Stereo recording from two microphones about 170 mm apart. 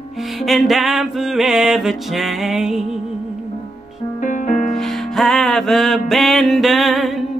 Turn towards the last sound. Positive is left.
turn(degrees=0)  # may be behind; listen again after turning